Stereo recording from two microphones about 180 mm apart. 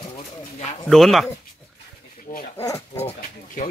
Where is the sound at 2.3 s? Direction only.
45° left (ahead or behind).